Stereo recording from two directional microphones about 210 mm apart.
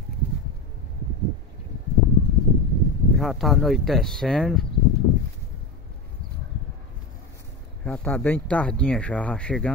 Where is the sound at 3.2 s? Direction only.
Centre (ahead or behind).